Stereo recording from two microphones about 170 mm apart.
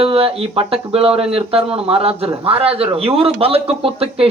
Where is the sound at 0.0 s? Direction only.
35° right (ahead or behind).